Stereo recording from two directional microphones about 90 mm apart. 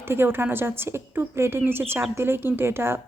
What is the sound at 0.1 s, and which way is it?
A woman's voice, 25° right (ahead or behind).